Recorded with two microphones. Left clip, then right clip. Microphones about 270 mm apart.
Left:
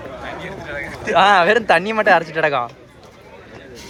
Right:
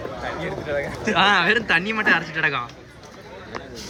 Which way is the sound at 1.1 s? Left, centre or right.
Centre.